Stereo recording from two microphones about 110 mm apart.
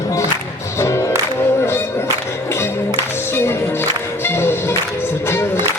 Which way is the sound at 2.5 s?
25° left (ahead or behind).